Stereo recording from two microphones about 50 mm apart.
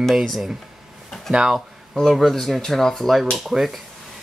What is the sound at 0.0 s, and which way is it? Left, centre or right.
Speech, centre.